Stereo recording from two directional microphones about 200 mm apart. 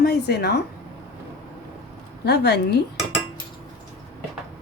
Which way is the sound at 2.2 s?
55° left (ahead or behind).